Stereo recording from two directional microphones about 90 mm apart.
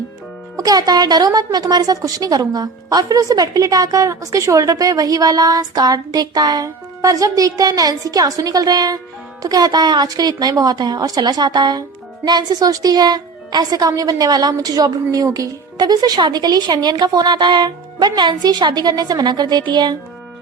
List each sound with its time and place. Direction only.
0.5 s speech: 45° right (ahead or behind)